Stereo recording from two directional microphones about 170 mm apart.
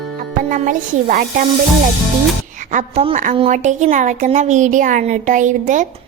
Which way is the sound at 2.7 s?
40° right (ahead or behind).